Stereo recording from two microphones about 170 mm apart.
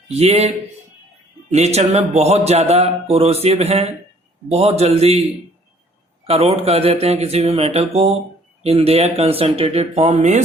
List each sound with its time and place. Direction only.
0.1 s a man's voice: 40° right (ahead or behind)
6.2 s a man's voice: 35° right (ahead or behind)